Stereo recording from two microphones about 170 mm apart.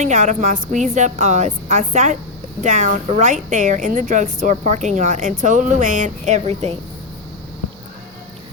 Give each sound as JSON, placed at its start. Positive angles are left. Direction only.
{"t": 0.0, "sound": "a woman's voice", "side_deg": -45}